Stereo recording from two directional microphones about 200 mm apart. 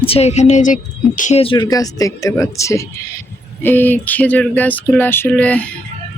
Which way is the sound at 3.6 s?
10° left (ahead or behind).